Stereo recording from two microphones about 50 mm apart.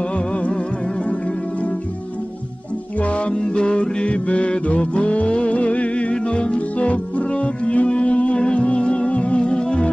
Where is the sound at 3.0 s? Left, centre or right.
Left.